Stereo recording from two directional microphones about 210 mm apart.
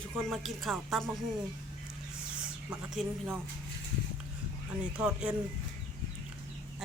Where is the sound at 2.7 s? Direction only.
5° right (ahead or behind).